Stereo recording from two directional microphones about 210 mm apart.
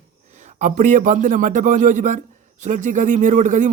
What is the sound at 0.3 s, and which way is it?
A man's voice, 35° right (ahead or behind).